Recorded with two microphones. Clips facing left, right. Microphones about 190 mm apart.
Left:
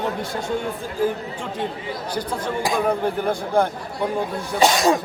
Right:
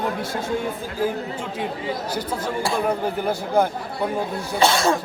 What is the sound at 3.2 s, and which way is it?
Speech, 5° right (ahead or behind).